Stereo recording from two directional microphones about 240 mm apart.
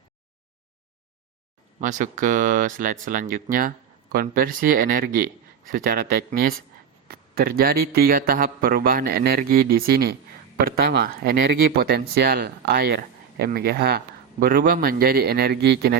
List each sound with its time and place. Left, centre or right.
1.8 s speech: right
7.1 s speech: right